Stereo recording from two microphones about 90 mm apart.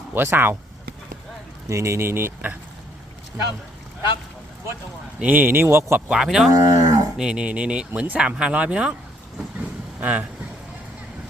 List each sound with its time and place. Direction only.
0.1 s speech: 25° right (ahead or behind)
1.7 s speech: 35° right (ahead or behind)
5.2 s speech: 20° right (ahead or behind)
6.1 s speech: 5° right (ahead or behind)
6.5 s speech: 40° right (ahead or behind)
7.2 s speech: 10° right (ahead or behind)
10.0 s speech: 15° right (ahead or behind)